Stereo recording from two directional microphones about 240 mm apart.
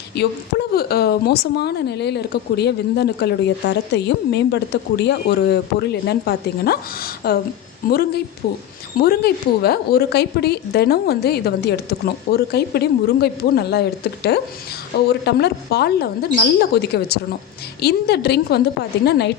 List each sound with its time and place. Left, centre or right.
0.1 s a woman's voice: left